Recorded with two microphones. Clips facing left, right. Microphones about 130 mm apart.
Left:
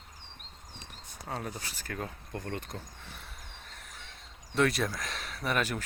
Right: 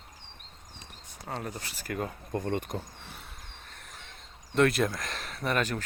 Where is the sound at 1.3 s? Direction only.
Centre (ahead or behind); by 2.8 s 15° right (ahead or behind).